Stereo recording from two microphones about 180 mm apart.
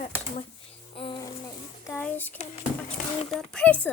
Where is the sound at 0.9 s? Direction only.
30° left (ahead or behind).